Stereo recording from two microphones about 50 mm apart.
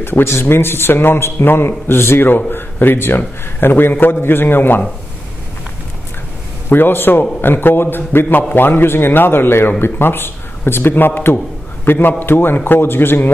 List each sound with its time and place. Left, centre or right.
0.0 s a man's voice: left
6.7 s a man's voice: left